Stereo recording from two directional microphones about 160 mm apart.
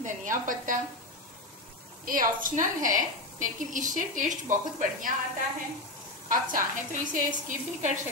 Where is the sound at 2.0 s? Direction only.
60° right (ahead or behind).